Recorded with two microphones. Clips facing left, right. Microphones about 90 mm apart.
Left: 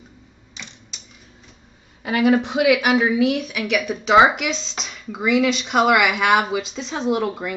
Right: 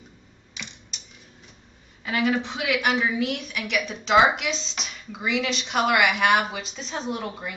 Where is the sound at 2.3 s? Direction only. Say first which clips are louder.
Left 9 dB; 60° left (ahead or behind).